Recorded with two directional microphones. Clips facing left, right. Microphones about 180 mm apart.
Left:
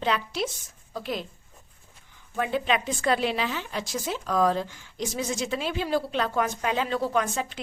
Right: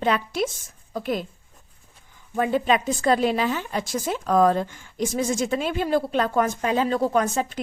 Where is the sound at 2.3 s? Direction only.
45° right (ahead or behind).